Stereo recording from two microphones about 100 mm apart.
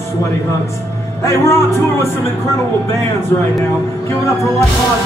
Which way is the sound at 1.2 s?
30° left (ahead or behind).